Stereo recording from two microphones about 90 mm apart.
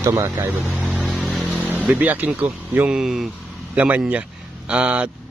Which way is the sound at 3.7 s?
15° right (ahead or behind).